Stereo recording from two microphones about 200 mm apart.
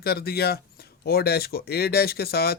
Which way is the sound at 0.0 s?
50° left (ahead or behind).